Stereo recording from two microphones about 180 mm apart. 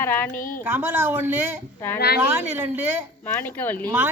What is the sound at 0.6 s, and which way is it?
Speech, 15° right (ahead or behind).